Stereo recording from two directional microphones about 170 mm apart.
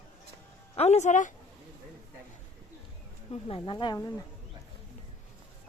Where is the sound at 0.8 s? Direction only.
40° left (ahead or behind).